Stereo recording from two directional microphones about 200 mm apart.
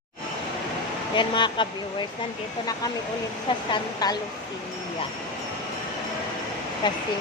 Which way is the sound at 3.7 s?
20° left (ahead or behind).